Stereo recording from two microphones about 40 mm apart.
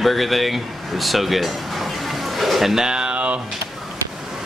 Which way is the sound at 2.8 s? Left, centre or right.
Right.